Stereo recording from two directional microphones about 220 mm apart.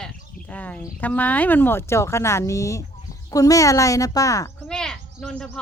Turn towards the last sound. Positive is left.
turn(degrees=5)  # may be behind; listen again after turning